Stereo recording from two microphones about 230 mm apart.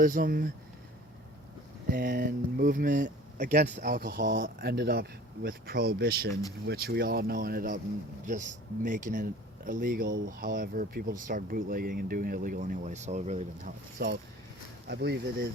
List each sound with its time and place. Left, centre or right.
0.0 s speech: right
1.9 s speech: right
14.0 s speech: right